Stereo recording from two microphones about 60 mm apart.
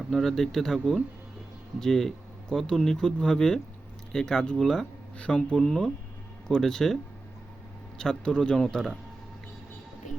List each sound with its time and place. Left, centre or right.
0.1 s speech: centre
5.1 s speech: centre